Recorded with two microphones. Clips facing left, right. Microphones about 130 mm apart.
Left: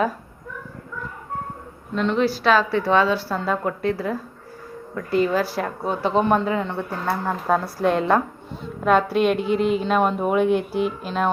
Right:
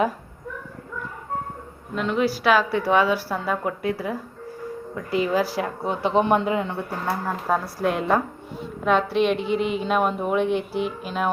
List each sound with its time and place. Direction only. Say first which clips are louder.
2.0 s a woman's voice: left 2 dB; 10° right (ahead or behind)
7.3 s a woman's voice: left 4 dB; centre (ahead or behind)